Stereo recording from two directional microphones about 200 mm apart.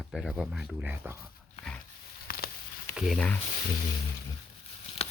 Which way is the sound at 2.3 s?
45° left (ahead or behind).